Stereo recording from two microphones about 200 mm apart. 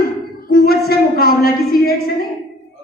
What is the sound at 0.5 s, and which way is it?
A woman's voice, 50° left (ahead or behind).